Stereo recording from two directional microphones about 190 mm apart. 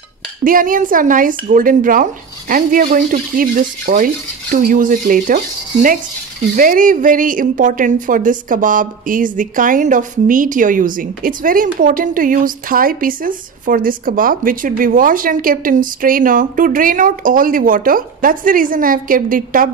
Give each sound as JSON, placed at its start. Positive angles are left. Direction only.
{"t": 0.4, "sound": "a woman's voice", "side_deg": -45}